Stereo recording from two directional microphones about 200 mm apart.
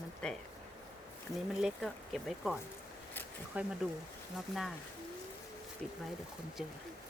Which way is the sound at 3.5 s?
5° right (ahead or behind).